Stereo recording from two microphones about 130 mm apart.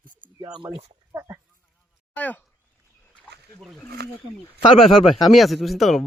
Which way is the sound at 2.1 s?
10° left (ahead or behind).